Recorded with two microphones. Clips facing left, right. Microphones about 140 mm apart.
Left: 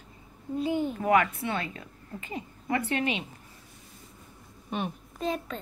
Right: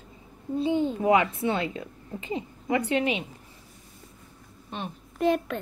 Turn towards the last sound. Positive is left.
turn(degrees=-70)  # may be behind; listen again after turning